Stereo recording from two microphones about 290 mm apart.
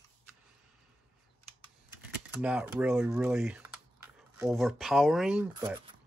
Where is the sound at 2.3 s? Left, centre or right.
Centre.